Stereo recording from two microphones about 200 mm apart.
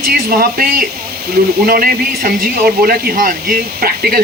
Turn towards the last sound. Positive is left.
turn(degrees=-50)  # may be behind; listen again after turning